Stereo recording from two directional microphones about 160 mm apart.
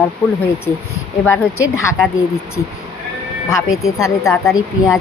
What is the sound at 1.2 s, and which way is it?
Speech, 15° left (ahead or behind).